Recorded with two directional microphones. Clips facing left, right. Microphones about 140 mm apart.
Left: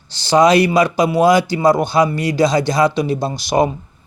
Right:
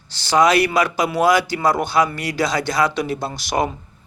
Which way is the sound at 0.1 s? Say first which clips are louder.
Left 4 dB; 20° left (ahead or behind).